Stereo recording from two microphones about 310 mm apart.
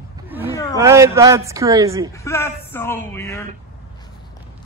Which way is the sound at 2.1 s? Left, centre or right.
Centre.